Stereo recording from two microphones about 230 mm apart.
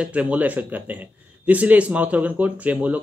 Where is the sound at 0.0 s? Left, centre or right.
Centre.